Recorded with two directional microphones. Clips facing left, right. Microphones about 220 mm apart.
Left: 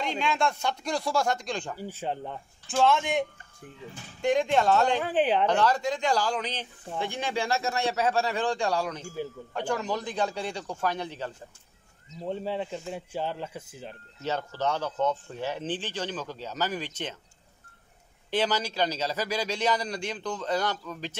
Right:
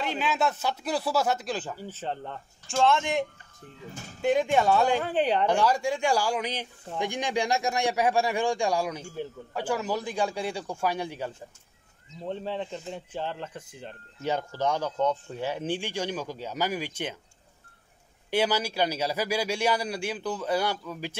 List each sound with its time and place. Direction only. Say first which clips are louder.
0.0 s speech: even; 5° right (ahead or behind)
1.8 s speech: left 2 dB; 10° left (ahead or behind)
3.9 s speech: right 3 dB; 45° right (ahead or behind)
4.2 s speech: right 1 dB; 5° right (ahead or behind)
5.0 s speech: left 1 dB; 5° left (ahead or behind)
5.5 s speech: right 1 dB; 10° right (ahead or behind)
12.3 s speech: left 1 dB; 10° left (ahead or behind)
14.2 s speech: right 2 dB; 15° right (ahead or behind)
18.3 s speech: right 2 dB; 10° right (ahead or behind)